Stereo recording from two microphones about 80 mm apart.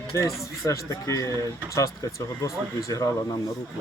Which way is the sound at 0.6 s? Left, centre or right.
Left.